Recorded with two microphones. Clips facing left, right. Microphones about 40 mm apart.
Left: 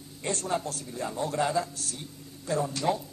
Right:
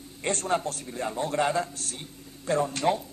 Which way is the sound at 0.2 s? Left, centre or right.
Right.